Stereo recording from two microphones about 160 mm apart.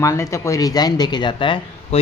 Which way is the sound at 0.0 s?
20° left (ahead or behind).